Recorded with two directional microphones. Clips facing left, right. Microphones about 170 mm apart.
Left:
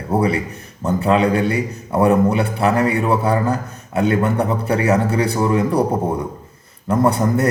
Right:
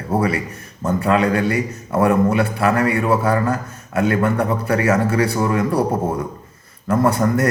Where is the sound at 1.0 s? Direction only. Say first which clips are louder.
Left 1 dB; 25° left (ahead or behind).